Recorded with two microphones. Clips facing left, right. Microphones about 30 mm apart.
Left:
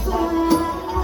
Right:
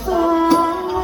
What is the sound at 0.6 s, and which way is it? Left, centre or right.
Music, right.